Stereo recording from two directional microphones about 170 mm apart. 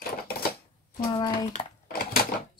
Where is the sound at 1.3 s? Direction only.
55° left (ahead or behind).